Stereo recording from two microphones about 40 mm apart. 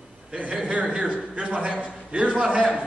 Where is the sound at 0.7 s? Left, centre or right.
Right.